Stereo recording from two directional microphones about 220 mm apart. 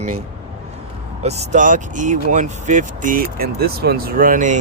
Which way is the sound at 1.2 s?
30° right (ahead or behind).